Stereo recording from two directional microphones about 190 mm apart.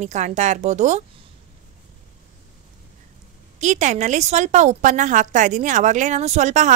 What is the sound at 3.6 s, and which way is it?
A woman's voice, 40° right (ahead or behind).